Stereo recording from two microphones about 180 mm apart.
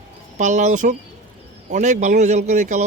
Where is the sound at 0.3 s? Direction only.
45° right (ahead or behind).